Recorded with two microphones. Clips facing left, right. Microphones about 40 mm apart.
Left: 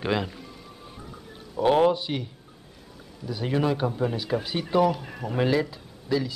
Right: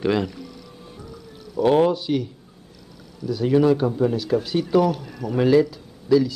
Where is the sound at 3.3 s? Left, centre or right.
Centre.